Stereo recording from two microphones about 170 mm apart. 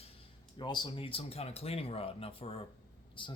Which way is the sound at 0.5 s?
25° left (ahead or behind).